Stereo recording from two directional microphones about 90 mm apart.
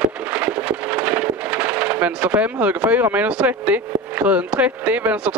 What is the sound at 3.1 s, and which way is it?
Speech, 15° right (ahead or behind).